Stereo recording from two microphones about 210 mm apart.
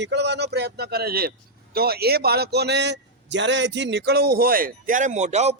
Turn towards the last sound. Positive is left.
turn(degrees=-30)  # may be behind; listen again after turning